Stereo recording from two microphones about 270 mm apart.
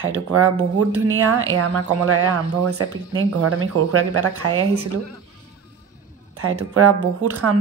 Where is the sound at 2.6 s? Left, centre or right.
Right.